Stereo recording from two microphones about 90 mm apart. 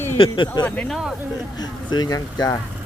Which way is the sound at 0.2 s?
60° left (ahead or behind).